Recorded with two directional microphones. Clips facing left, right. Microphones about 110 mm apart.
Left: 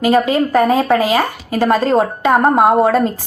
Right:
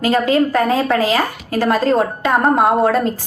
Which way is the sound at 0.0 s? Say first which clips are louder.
Left 1 dB; centre (ahead or behind).